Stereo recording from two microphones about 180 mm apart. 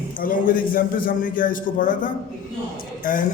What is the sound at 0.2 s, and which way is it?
A man's voice, 50° left (ahead or behind).